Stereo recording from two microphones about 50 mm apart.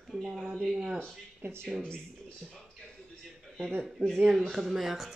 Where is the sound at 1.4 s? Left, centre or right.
Right.